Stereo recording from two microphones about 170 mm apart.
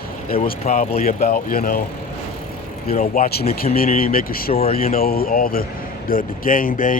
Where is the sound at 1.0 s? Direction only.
60° left (ahead or behind).